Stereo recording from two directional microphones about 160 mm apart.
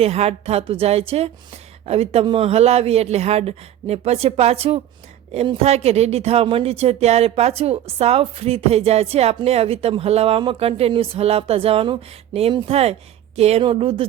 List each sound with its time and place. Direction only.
0.0 s a woman's voice: 40° right (ahead or behind)